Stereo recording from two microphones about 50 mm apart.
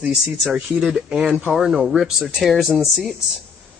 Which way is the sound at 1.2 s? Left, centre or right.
Right.